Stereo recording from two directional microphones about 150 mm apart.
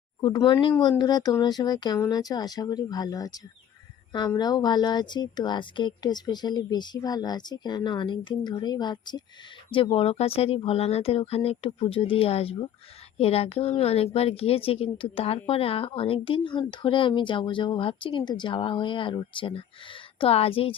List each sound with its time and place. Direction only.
0.2 s a woman's voice: 30° left (ahead or behind)